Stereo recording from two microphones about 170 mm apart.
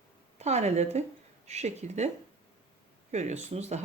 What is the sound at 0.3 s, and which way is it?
Speech, 40° right (ahead or behind).